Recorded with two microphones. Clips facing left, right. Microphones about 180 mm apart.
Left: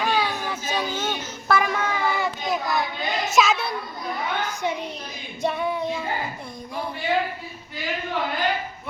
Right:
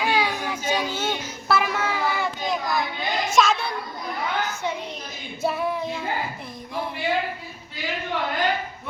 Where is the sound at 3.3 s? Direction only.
Centre (ahead or behind).